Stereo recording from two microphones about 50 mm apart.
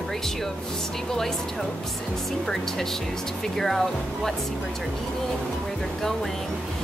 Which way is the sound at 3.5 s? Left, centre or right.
Centre.